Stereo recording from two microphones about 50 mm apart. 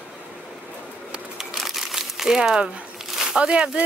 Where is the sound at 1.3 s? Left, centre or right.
Centre.